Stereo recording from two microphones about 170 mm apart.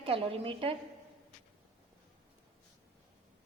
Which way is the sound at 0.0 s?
35° right (ahead or behind).